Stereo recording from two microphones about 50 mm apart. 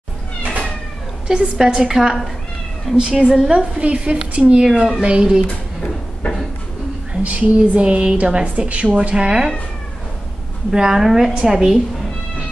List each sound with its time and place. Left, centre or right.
1.2 s a woman's voice: centre
4.6 s a woman's voice: centre
7.2 s a woman's voice: right
10.7 s a woman's voice: centre
11.1 s a woman's voice: centre